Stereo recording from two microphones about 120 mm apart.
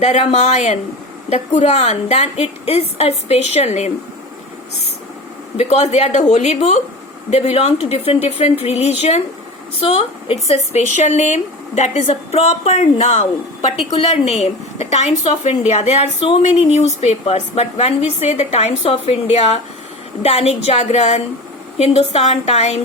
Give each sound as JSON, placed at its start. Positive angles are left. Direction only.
{"t": 0.0, "sound": "speech", "side_deg": 70}
{"t": 5.5, "sound": "speech", "side_deg": 60}
{"t": 9.8, "sound": "speech", "side_deg": 50}
{"t": 16.4, "sound": "speech", "side_deg": 65}